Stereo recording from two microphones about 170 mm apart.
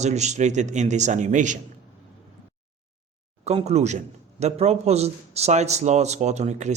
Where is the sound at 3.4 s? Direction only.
40° right (ahead or behind).